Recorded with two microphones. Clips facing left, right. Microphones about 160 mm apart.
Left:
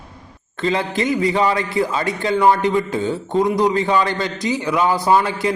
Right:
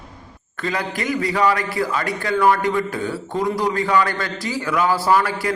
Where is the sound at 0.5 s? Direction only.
25° left (ahead or behind).